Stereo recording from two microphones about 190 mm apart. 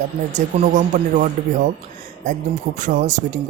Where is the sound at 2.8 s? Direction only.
45° right (ahead or behind).